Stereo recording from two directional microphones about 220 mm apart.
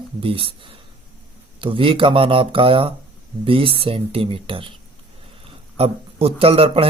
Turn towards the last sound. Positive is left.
turn(degrees=-25)  # may be behind; listen again after turning